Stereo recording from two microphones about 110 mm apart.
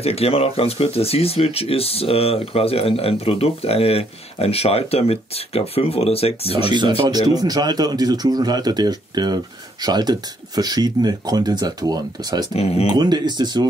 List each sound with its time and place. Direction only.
0.0 s speech: 65° left (ahead or behind)
7.1 s speech: 40° right (ahead or behind)
12.5 s speech: 70° left (ahead or behind)
12.8 s speech: 40° right (ahead or behind)